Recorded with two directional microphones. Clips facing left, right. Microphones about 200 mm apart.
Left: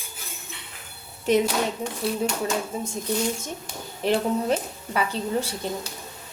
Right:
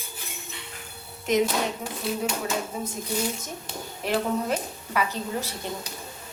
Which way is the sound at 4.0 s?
30° left (ahead or behind).